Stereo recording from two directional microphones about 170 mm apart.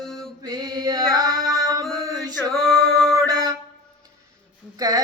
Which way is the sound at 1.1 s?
20° right (ahead or behind).